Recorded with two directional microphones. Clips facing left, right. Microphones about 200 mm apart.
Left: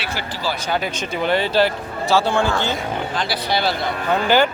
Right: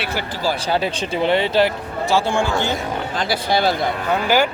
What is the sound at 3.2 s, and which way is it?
Speech, 45° right (ahead or behind).